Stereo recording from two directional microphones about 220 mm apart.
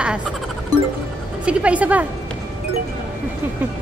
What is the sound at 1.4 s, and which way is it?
Speech, 5° right (ahead or behind).